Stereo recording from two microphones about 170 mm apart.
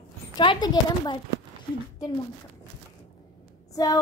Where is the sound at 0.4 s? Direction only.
25° left (ahead or behind).